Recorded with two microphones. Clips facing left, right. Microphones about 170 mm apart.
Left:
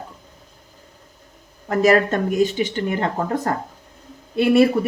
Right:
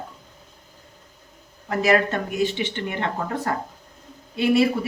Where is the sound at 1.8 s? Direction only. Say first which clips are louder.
Left 4 dB; 40° left (ahead or behind).